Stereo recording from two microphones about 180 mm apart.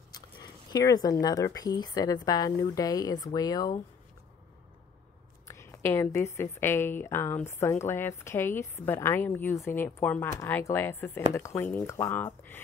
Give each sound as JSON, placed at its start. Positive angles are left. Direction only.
{"t": 0.1, "sound": "zipper", "side_deg": 20}
{"t": 1.2, "sound": "speech", "side_deg": 20}
{"t": 5.5, "sound": "a woman's voice", "side_deg": 15}